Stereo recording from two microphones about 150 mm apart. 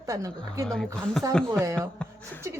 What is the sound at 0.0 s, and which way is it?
Speech, 20° right (ahead or behind).